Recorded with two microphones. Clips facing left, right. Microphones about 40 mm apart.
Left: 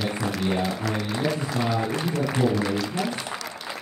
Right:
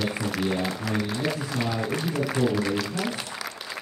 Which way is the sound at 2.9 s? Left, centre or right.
Left.